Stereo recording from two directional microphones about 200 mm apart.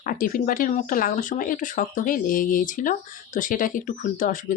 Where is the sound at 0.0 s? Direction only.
45° left (ahead or behind).